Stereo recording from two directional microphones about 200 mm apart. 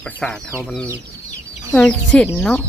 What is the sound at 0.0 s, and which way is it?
Speech, 5° left (ahead or behind).